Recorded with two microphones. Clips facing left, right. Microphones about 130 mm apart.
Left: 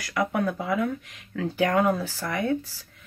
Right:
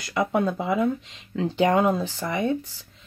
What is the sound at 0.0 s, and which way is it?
Speech, 25° right (ahead or behind).